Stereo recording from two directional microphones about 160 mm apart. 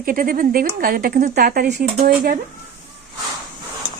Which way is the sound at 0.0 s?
60° right (ahead or behind).